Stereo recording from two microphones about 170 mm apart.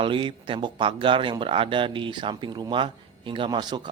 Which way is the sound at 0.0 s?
30° right (ahead or behind).